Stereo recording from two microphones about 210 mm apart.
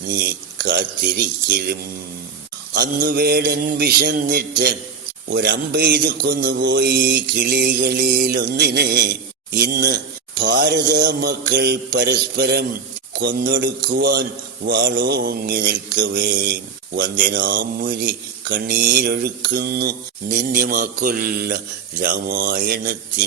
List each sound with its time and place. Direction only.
0.6 s mantra: 50° right (ahead or behind)